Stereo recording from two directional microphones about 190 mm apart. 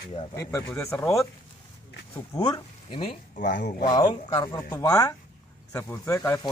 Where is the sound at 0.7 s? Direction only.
10° left (ahead or behind).